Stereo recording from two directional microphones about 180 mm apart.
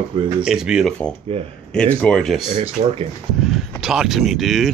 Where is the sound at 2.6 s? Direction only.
35° right (ahead or behind).